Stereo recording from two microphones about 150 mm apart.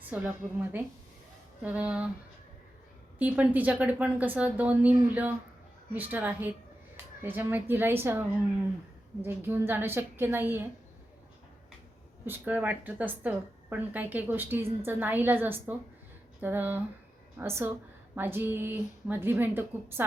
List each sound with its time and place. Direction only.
0.1 s a woman's voice: 10° right (ahead or behind)
3.2 s a woman's voice: 10° right (ahead or behind)
12.2 s a woman's voice: 10° right (ahead or behind)